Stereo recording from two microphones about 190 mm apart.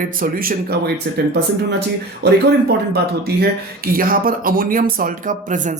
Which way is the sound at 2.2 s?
60° right (ahead or behind).